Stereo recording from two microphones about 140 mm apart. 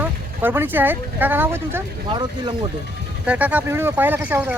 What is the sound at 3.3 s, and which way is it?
Speech, 10° right (ahead or behind).